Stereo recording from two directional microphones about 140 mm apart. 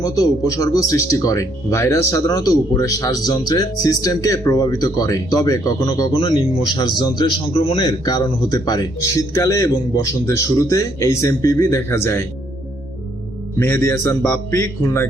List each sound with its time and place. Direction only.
0.0 s speech: 25° left (ahead or behind)
7.9 s speech: 30° left (ahead or behind)
13.6 s speech: 15° left (ahead or behind)